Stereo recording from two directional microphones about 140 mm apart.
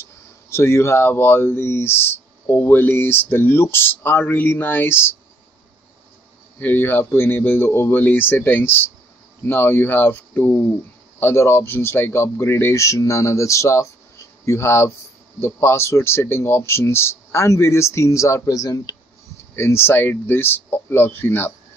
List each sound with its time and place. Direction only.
0.5 s speech: 20° left (ahead or behind)
6.6 s speech: 15° left (ahead or behind)